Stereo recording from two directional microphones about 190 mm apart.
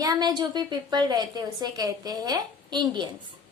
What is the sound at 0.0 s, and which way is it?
A woman's voice, 20° right (ahead or behind).